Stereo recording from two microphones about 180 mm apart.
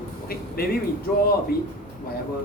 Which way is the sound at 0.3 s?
55° left (ahead or behind).